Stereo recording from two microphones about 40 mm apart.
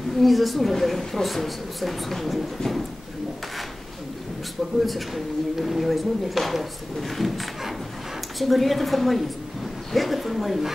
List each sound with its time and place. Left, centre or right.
0.1 s speech: centre
4.7 s speech: centre